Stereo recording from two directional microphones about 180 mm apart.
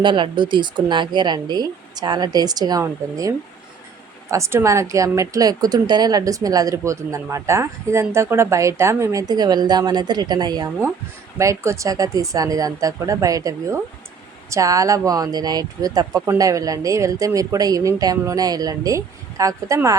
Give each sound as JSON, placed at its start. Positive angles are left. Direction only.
{"t": 0.0, "sound": "a woman's voice", "side_deg": -25}